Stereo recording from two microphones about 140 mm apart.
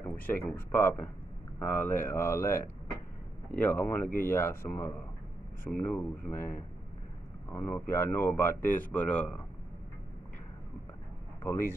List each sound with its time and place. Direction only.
0.0 s a sound: 15° left (ahead or behind)
0.7 s a man's voice: 15° left (ahead or behind)
11.4 s a man's voice: 15° left (ahead or behind)